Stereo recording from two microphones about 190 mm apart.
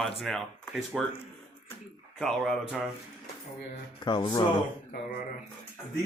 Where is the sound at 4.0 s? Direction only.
25° left (ahead or behind).